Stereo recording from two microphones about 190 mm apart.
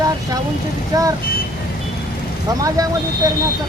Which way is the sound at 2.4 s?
20° right (ahead or behind).